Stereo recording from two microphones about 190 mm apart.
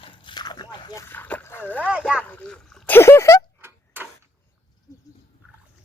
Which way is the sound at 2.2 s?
5° left (ahead or behind).